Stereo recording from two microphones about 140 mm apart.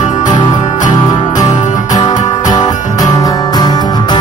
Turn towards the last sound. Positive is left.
turn(degrees=30)  # may be behind; listen again after turning